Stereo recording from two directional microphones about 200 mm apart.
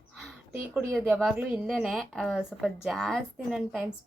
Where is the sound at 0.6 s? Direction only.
5° right (ahead or behind).